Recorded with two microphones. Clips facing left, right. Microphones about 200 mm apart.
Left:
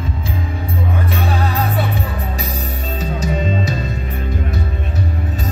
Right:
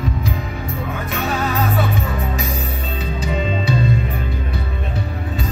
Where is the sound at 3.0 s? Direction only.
45° left (ahead or behind).